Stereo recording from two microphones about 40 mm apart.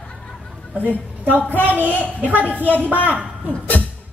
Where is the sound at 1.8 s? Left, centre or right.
Left.